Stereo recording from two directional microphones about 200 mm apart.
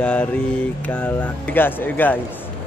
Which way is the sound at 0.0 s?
5° left (ahead or behind).